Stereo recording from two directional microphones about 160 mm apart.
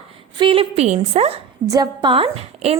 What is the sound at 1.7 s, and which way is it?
A woman's voice, 25° right (ahead or behind).